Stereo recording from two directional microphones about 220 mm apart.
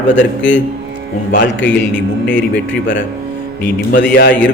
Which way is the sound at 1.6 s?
5° left (ahead or behind).